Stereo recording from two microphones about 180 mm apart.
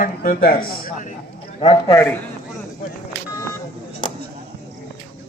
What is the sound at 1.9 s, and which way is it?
Speech, 10° left (ahead or behind).